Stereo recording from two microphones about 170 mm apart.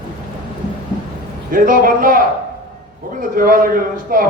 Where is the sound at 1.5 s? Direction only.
55° right (ahead or behind).